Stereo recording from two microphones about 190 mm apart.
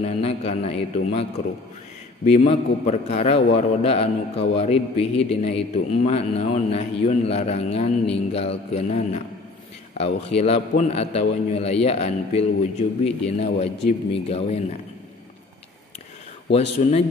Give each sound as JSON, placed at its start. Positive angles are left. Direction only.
{"t": 0.0, "sound": "a man's voice", "side_deg": 35}
{"t": 2.2, "sound": "a man's voice", "side_deg": 35}
{"t": 16.8, "sound": "a man's voice", "side_deg": 35}